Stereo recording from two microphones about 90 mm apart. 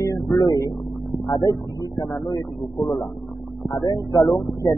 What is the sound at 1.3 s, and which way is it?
Speech, 50° left (ahead or behind).